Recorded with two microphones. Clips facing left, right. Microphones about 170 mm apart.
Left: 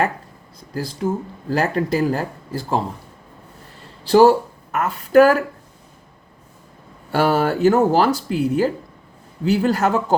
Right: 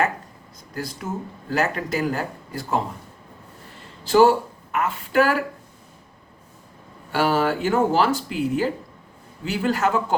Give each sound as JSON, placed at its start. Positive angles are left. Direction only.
{"t": 0.7, "sound": "speech", "side_deg": 30}
{"t": 4.0, "sound": "a woman's voice", "side_deg": 35}
{"t": 7.1, "sound": "speech", "side_deg": 45}